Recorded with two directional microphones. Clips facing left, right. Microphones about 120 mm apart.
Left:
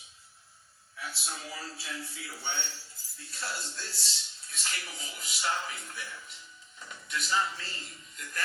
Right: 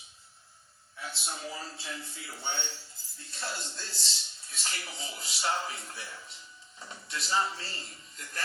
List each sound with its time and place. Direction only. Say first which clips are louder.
0.9 s speech: right 1 dB; 25° right (ahead or behind)